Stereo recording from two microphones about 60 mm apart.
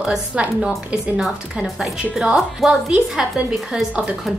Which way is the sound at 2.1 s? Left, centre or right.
Centre.